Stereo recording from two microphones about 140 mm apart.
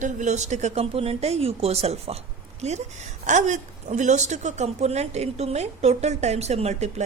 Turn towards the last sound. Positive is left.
turn(degrees=-55)  # may be behind; listen again after turning